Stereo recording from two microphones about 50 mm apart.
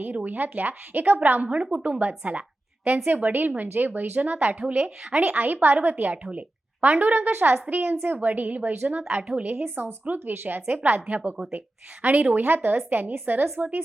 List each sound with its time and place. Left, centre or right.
0.0 s a woman's voice: right
9.0 s a woman's voice: right
9.4 s a woman's voice: right